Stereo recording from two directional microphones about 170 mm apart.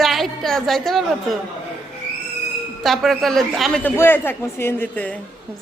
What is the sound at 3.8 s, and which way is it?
A man's voice, 10° left (ahead or behind).